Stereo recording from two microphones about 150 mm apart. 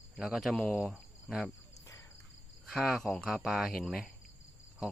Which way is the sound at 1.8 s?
20° left (ahead or behind).